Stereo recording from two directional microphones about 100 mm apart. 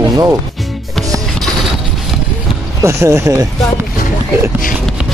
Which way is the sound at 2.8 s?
30° right (ahead or behind).